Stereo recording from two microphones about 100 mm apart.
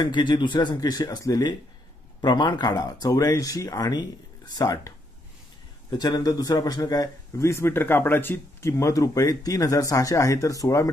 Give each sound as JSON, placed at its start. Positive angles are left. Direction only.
{"t": 0.0, "sound": "speech", "side_deg": 50}
{"t": 2.2, "sound": "a man's voice", "side_deg": 50}